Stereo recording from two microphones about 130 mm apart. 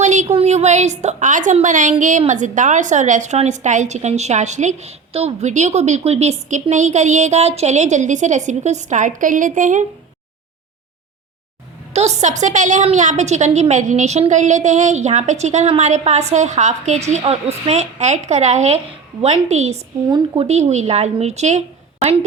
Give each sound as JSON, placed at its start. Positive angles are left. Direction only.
{"t": 0.0, "sound": "a sound", "side_deg": -65}
{"t": 0.3, "sound": "a woman's voice", "side_deg": -60}
{"t": 11.9, "sound": "a woman's voice", "side_deg": -60}
{"t": 12.4, "sound": "a woman's voice", "side_deg": -70}
{"t": 17.7, "sound": "a woman's voice", "side_deg": -60}